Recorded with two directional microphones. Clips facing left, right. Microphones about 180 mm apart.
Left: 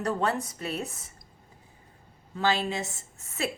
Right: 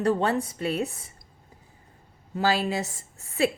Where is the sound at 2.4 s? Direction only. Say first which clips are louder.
Right 2 dB; 35° right (ahead or behind).